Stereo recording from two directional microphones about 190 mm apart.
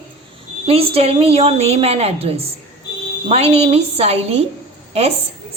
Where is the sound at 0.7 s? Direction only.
30° right (ahead or behind).